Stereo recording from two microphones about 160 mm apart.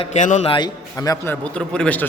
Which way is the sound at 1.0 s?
20° left (ahead or behind).